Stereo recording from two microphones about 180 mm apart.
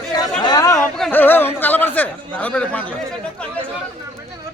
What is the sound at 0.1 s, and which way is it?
Chatter, 20° left (ahead or behind).